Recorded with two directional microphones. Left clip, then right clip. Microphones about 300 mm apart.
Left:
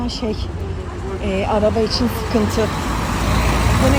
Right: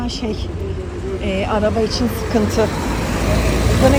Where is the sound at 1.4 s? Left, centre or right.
Centre.